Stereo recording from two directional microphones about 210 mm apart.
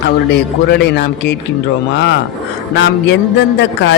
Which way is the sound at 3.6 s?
60° left (ahead or behind).